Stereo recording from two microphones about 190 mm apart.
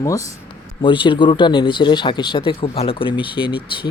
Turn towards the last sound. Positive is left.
turn(degrees=25)  # may be behind; listen again after turning